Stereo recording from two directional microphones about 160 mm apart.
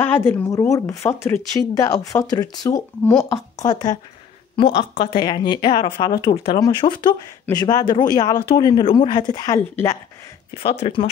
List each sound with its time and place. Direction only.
0.0 s speech: 10° left (ahead or behind)
3.0 s speech: 10° left (ahead or behind)
3.3 s speech: 25° left (ahead or behind)
10.6 s speech: 35° left (ahead or behind)